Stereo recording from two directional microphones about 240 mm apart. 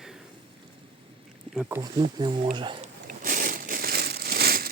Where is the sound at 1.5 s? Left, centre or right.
Centre.